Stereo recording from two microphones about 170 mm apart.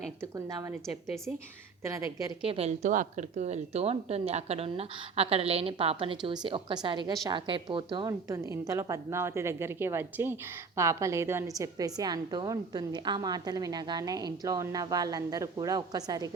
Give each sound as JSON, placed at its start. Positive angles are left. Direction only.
{"t": 0.2, "sound": "a woman's voice", "side_deg": -15}
{"t": 2.4, "sound": "a woman's voice", "side_deg": -35}
{"t": 8.3, "sound": "a woman's voice", "side_deg": -15}